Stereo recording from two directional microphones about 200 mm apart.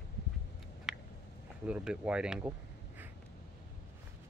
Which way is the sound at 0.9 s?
Centre (ahead or behind).